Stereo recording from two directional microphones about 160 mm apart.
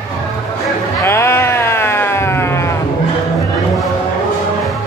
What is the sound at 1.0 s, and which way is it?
Sheep, 15° left (ahead or behind).